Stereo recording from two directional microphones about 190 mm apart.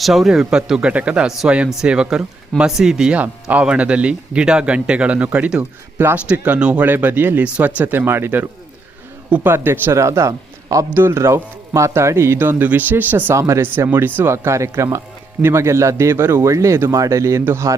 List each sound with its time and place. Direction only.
0.0 s a man's voice: centre (ahead or behind)